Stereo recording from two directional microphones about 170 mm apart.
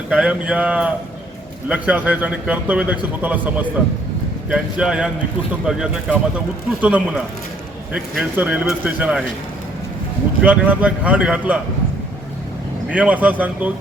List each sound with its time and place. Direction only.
0.1 s a man's voice: 5° right (ahead or behind)
10.4 s a man's voice: 10° right (ahead or behind)
12.9 s a man's voice: 10° right (ahead or behind)